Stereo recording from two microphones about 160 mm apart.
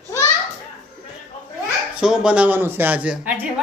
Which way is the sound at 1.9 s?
5° right (ahead or behind).